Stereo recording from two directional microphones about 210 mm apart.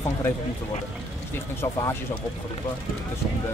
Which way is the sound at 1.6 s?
15° left (ahead or behind).